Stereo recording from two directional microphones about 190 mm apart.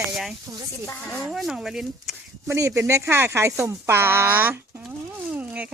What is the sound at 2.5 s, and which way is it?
Speech, 15° right (ahead or behind).